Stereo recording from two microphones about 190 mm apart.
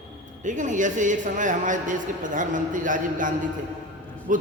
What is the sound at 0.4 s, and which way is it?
A man's voice, 40° right (ahead or behind).